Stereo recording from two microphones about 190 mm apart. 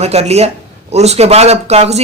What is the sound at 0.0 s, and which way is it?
Speech, 35° right (ahead or behind).